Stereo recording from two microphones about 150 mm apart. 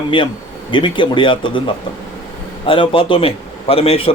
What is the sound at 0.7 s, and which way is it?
A man's voice, 35° left (ahead or behind).